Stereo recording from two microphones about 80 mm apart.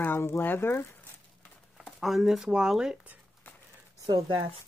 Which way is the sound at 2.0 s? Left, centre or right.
Centre.